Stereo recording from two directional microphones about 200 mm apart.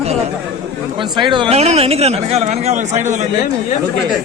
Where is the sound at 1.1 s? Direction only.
25° right (ahead or behind).